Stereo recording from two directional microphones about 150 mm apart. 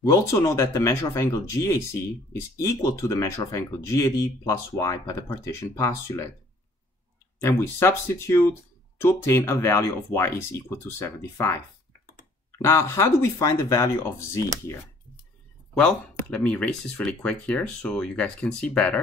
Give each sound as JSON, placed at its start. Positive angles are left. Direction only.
{"t": 0.1, "sound": "speech", "side_deg": 20}
{"t": 7.4, "sound": "speech", "side_deg": 20}
{"t": 15.7, "sound": "speech", "side_deg": 5}